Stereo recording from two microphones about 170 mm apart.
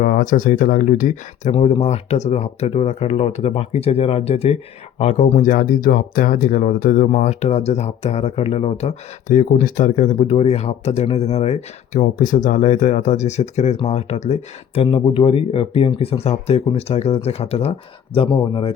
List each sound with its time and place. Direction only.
0.0 s speech: 50° left (ahead or behind)
1.5 s speech: 40° left (ahead or behind)
11.9 s speech: 50° left (ahead or behind)
14.8 s speech: 30° left (ahead or behind)